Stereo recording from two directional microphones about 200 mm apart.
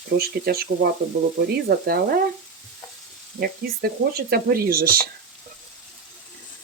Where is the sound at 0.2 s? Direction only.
50° right (ahead or behind).